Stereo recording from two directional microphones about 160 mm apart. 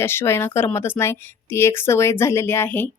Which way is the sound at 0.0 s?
15° left (ahead or behind).